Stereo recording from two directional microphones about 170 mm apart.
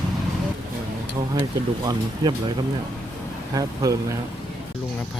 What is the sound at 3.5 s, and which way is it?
Speech, 20° right (ahead or behind).